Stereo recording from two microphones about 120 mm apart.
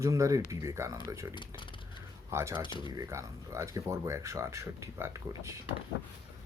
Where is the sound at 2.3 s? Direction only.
25° right (ahead or behind).